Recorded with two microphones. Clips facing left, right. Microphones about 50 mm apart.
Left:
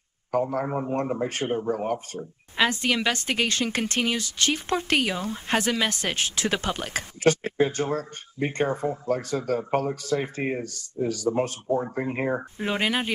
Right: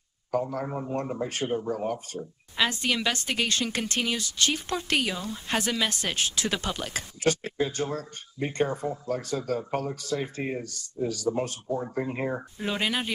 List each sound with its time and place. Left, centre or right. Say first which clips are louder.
0.3 s a man's voice: left 4 dB; left